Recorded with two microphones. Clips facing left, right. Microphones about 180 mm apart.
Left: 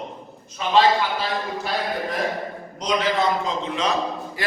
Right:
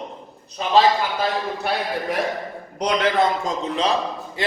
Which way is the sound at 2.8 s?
60° right (ahead or behind).